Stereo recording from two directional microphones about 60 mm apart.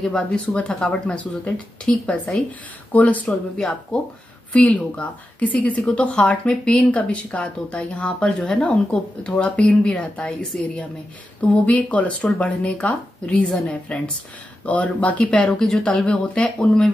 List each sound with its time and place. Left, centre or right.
0.0 s a woman's voice: centre
1.9 s a woman's voice: centre
2.9 s speech: left
3.3 s a woman's voice: centre
4.6 s a woman's voice: left